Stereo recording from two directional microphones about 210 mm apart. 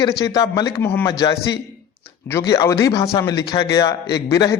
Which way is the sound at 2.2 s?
15° left (ahead or behind).